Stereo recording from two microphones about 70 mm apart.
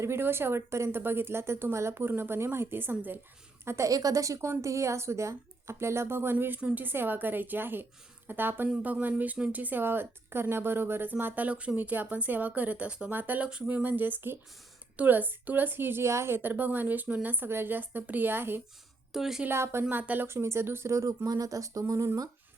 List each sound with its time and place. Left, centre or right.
0.0 s speech: right
3.6 s a woman's voice: right
3.8 s a woman's voice: right
19.1 s a woman's voice: centre
19.5 s speech: right
19.9 s speech: right
21.2 s speech: right